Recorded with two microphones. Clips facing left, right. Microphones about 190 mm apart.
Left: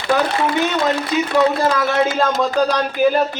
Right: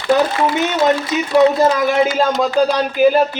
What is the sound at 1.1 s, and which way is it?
A man's voice, 20° right (ahead or behind).